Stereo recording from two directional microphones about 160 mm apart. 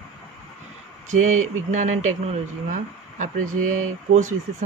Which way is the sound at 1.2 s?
50° right (ahead or behind).